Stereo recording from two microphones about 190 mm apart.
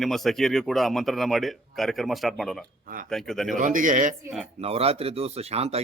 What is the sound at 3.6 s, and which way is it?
Speech, 45° right (ahead or behind).